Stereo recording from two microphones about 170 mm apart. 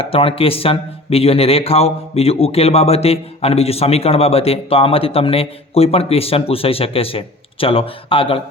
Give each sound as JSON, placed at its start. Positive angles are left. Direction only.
{"t": 0.0, "sound": "speech", "side_deg": 35}